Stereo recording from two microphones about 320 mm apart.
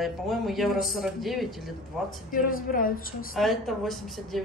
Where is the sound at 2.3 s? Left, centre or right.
Left.